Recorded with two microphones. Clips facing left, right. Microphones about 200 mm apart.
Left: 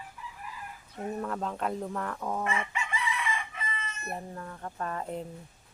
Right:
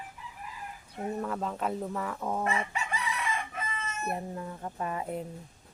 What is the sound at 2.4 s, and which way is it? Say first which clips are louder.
Chicken: right 1 dB; 35° right (ahead or behind).